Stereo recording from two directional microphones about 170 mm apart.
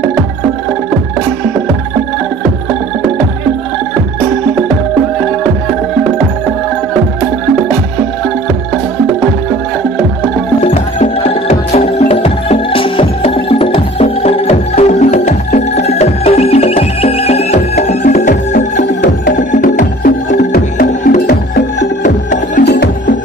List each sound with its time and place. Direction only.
10.6 s music: 35° left (ahead or behind)
22.6 s music: 75° left (ahead or behind)